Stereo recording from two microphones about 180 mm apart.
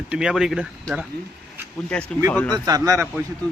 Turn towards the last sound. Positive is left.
turn(degrees=-15)  # may be behind; listen again after turning